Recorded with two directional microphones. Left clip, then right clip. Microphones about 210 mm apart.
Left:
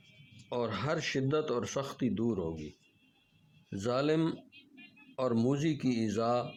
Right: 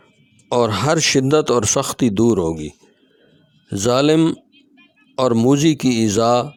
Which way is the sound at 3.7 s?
45° right (ahead or behind).